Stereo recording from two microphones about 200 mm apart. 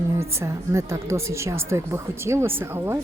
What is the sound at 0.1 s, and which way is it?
A woman's voice, 15° right (ahead or behind).